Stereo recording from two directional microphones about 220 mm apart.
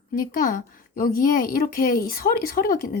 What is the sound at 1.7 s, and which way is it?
Speech, 40° left (ahead or behind).